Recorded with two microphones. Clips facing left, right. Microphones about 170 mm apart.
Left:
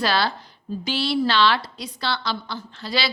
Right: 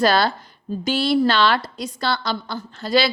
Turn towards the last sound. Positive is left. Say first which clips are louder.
# right 7 dB
turn(degrees=-45)  # may be behind; listen again after turning